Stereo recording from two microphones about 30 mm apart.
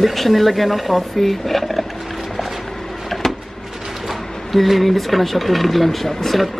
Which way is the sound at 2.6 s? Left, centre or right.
Centre.